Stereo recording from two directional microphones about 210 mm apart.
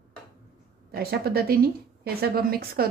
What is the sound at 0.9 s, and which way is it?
A woman's voice, 45° right (ahead or behind).